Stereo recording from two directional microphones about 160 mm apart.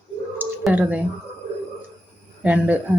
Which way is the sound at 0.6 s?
10° right (ahead or behind).